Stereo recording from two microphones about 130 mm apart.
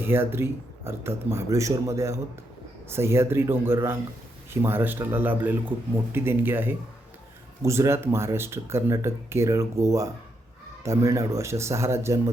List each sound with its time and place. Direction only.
0.0 s speech: 15° right (ahead or behind)